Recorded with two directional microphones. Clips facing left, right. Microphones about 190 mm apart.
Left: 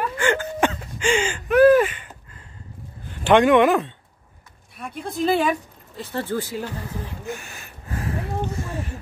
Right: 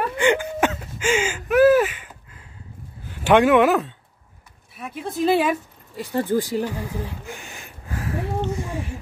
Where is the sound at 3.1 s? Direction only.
5° right (ahead or behind).